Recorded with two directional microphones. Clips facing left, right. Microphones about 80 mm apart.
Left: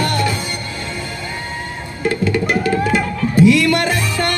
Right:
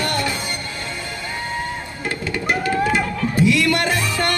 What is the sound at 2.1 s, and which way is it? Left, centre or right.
Music, right.